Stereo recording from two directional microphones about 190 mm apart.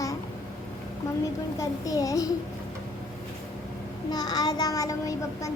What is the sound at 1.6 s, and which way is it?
Child singing, 20° left (ahead or behind).